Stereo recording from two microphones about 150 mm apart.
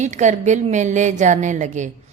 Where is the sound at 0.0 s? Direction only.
50° right (ahead or behind).